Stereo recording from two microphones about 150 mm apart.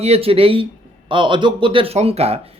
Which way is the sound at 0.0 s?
40° right (ahead or behind).